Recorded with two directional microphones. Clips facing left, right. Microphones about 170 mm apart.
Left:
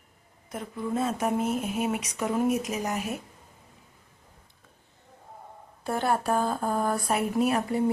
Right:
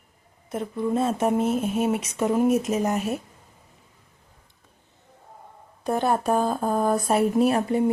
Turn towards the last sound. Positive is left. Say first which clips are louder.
# right 4 dB
turn(degrees=-20)  # may be behind; listen again after turning